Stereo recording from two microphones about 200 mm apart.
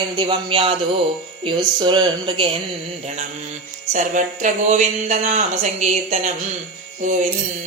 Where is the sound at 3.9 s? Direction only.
40° right (ahead or behind).